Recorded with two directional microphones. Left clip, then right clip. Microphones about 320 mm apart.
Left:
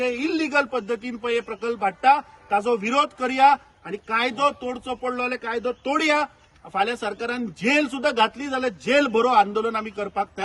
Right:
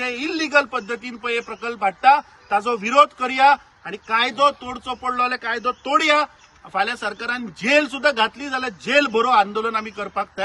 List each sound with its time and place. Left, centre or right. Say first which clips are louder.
0.0 s speech: even; centre